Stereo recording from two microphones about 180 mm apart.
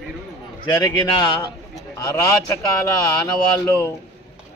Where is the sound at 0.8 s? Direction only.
25° left (ahead or behind).